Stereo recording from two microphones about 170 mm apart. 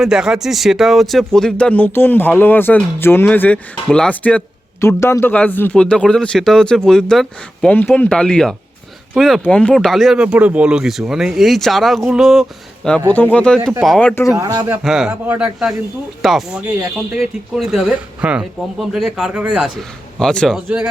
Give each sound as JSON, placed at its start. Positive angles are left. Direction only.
{"t": 0.0, "sound": "speech", "side_deg": -5}
{"t": 14.3, "sound": "a man's voice", "side_deg": -20}
{"t": 14.8, "sound": "speech", "side_deg": -5}